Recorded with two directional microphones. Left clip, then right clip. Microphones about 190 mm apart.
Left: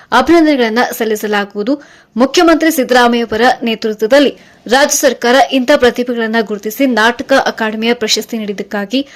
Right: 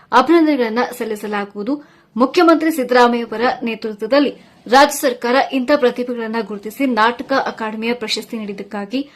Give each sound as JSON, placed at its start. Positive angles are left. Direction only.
{"t": 0.1, "sound": "a woman's voice", "side_deg": 15}